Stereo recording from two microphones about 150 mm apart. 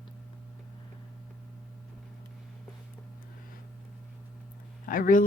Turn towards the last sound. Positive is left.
turn(degrees=65)  # may be behind; listen again after turning